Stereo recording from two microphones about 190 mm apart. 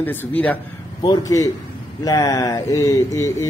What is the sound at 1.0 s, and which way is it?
A man's voice, 20° left (ahead or behind).